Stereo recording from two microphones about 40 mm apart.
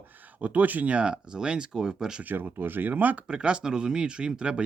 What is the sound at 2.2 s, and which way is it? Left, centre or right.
Speech, right.